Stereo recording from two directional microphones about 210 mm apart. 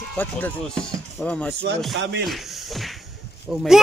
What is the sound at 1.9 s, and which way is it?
Speech, 60° right (ahead or behind).